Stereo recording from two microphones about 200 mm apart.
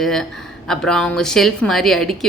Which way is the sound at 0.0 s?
5° left (ahead or behind).